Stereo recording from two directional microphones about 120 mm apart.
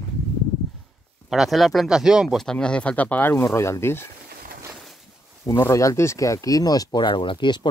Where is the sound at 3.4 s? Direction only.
25° left (ahead or behind).